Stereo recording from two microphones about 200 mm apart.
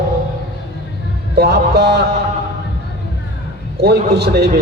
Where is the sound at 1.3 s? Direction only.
55° right (ahead or behind).